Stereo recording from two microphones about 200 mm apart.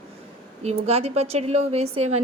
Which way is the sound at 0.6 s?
30° right (ahead or behind).